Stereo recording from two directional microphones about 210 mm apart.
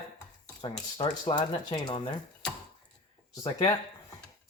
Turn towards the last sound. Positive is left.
turn(degrees=25)  # may be behind; listen again after turning